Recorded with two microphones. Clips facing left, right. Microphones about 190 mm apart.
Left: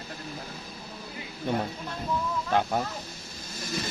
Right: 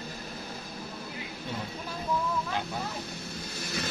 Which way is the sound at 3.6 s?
65° right (ahead or behind).